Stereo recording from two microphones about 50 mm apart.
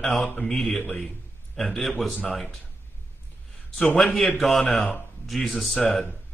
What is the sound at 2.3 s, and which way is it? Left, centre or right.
Speech, centre.